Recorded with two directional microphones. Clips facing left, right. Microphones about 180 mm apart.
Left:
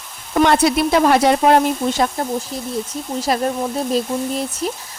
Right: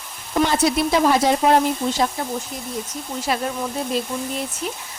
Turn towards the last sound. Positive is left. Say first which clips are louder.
# left 5 dB
turn(degrees=35)  # may be behind; listen again after turning